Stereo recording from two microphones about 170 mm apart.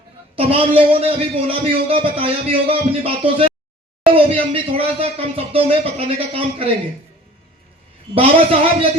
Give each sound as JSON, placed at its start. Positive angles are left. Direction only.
{"t": 0.3, "sound": "a man's voice", "side_deg": -35}
{"t": 8.1, "sound": "a man's voice", "side_deg": -35}